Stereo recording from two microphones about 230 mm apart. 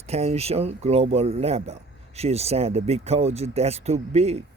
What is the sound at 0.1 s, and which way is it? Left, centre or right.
Speech, right.